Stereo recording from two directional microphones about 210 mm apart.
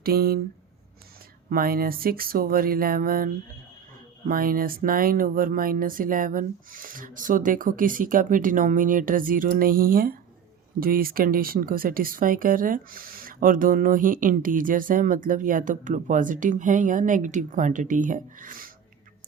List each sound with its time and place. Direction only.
0.0 s speech: 45° right (ahead or behind)
1.5 s speech: 45° right (ahead or behind)
4.3 s speech: 45° right (ahead or behind)